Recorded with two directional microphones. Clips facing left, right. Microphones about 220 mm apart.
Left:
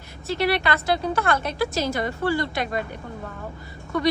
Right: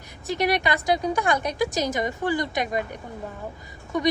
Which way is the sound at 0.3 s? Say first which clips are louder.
Left 1 dB; 15° right (ahead or behind).